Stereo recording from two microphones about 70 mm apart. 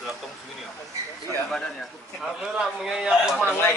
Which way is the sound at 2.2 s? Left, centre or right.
Centre.